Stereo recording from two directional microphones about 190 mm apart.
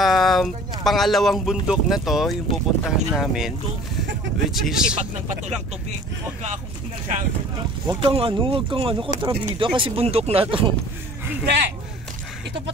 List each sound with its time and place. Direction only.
0.0 s speech: centre (ahead or behind)
7.8 s speech: 25° right (ahead or behind)
11.4 s speech: 60° right (ahead or behind)